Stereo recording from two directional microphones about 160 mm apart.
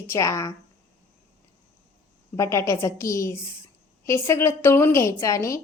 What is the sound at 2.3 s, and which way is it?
A woman's voice, 20° left (ahead or behind).